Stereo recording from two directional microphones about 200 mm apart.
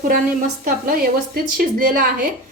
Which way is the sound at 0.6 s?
45° right (ahead or behind).